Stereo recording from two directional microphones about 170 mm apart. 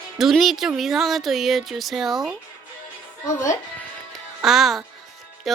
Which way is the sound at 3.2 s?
15° left (ahead or behind).